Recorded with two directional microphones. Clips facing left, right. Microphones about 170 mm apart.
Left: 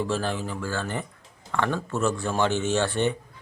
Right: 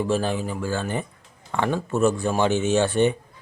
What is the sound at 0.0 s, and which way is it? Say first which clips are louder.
Speech: right 4 dB; 15° right (ahead or behind).